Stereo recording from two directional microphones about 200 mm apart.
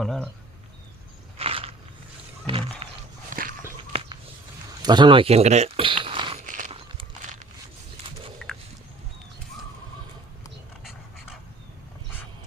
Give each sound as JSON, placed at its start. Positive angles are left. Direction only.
{"t": 0.0, "sound": "speech", "side_deg": 0}
{"t": 1.4, "sound": "biting", "side_deg": -30}
{"t": 2.5, "sound": "a sound", "side_deg": -30}
{"t": 3.2, "sound": "dog", "side_deg": -45}
{"t": 4.9, "sound": "speech", "side_deg": -25}
{"t": 6.4, "sound": "walk", "side_deg": -40}
{"t": 8.4, "sound": "a sound", "side_deg": 0}